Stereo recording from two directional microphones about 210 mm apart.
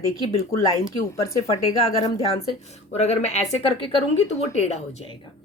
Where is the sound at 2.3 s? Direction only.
30° left (ahead or behind).